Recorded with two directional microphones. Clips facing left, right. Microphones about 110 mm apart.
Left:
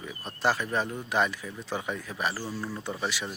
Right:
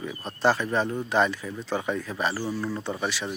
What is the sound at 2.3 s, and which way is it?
Speech, 15° right (ahead or behind).